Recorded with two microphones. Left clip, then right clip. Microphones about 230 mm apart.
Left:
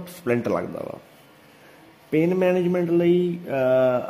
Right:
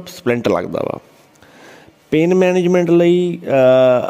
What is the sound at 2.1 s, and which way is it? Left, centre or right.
Speech, right.